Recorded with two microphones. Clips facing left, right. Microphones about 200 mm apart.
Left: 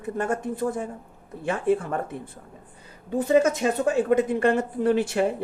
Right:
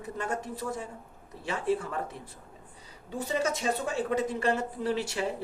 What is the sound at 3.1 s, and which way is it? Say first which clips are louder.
Speech: left 10 dB; 55° left (ahead or behind).